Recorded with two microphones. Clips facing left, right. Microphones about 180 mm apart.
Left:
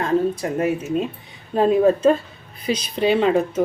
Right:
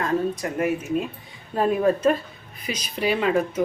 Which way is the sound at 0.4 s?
30° left (ahead or behind).